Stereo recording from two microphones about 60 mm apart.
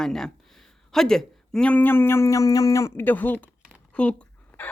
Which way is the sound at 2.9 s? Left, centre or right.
Left.